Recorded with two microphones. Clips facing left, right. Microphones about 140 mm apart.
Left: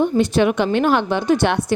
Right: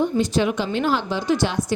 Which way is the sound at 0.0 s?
60° left (ahead or behind).